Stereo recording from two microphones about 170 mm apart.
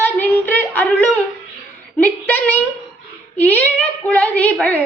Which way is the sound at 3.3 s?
10° left (ahead or behind).